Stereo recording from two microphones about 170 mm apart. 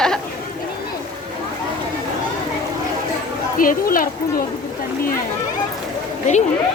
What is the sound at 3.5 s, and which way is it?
Speech, 55° left (ahead or behind).